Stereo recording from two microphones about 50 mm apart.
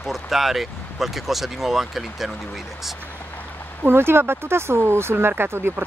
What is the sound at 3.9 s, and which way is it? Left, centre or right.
Speech, right.